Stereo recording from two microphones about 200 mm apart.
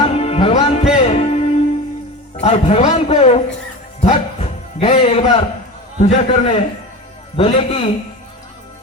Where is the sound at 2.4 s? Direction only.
30° left (ahead or behind).